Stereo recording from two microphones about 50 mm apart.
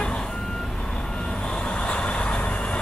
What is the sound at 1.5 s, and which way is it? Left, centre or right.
Vehicle, left.